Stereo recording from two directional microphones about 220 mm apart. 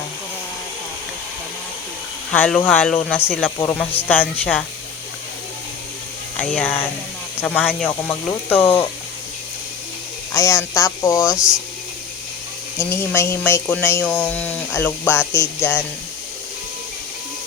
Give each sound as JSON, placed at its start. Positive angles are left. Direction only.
{"t": 2.3, "sound": "speech", "side_deg": 10}
{"t": 6.4, "sound": "speech", "side_deg": 5}
{"t": 10.3, "sound": "speech", "side_deg": 15}
{"t": 11.2, "sound": "speech", "side_deg": -5}
{"t": 12.9, "sound": "speech", "side_deg": 10}